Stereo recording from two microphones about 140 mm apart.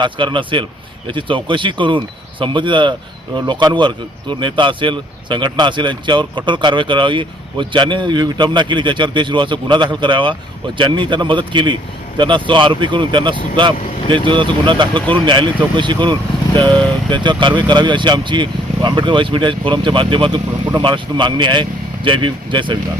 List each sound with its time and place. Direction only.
0.0 s speech: 35° right (ahead or behind)